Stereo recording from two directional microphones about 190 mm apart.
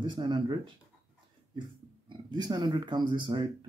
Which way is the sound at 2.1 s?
20° right (ahead or behind).